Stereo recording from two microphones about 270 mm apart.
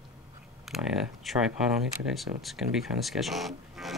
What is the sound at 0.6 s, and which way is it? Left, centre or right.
Speech, centre.